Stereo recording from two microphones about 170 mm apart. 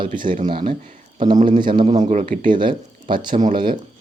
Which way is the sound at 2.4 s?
30° right (ahead or behind).